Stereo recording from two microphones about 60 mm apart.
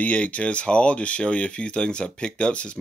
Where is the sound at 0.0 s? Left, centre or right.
Left.